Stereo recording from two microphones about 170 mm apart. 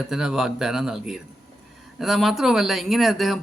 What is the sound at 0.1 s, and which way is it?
A man's voice, 5° right (ahead or behind).